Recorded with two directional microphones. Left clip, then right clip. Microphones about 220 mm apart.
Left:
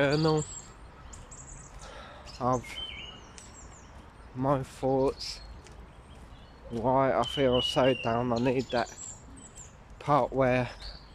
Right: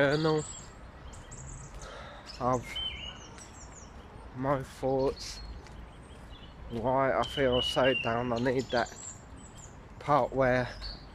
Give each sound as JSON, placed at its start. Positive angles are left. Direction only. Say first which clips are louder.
{"t": 0.0, "sound": "speech", "louder": "left 1 dB", "side_deg": 5}
{"t": 1.8, "sound": "chirp", "louder": "right 1 dB", "side_deg": 5}
{"t": 4.4, "sound": "speech", "louder": "left 2 dB", "side_deg": 10}
{"t": 6.7, "sound": "speech", "louder": "left 2 dB", "side_deg": 10}
{"t": 10.0, "sound": "speech", "louder": "left 1 dB", "side_deg": 5}